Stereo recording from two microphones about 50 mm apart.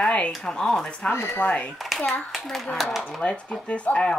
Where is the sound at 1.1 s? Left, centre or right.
Left.